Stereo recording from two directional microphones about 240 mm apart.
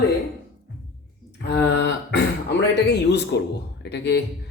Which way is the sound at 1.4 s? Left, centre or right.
Left.